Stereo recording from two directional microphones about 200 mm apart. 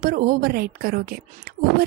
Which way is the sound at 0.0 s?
45° right (ahead or behind).